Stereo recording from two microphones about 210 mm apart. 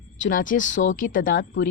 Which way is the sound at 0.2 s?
40° left (ahead or behind).